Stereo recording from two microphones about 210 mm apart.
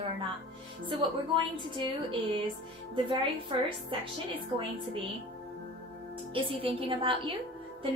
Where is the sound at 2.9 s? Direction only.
25° right (ahead or behind).